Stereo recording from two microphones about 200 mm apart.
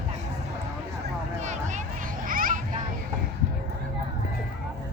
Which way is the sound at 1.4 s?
35° right (ahead or behind).